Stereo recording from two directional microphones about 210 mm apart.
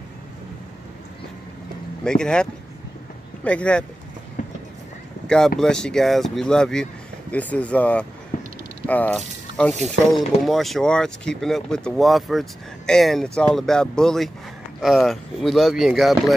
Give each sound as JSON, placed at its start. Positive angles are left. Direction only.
{"t": 2.0, "sound": "speech", "side_deg": 5}
{"t": 3.4, "sound": "speech", "side_deg": 5}
{"t": 4.4, "sound": "clip-clop", "side_deg": 40}
{"t": 5.6, "sound": "speech", "side_deg": 5}